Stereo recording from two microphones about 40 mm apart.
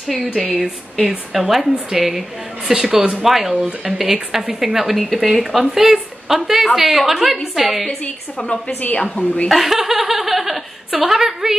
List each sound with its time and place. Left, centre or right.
0.1 s speech: centre
3.3 s speech: centre
9.1 s a woman's voice: left
9.5 s speech: centre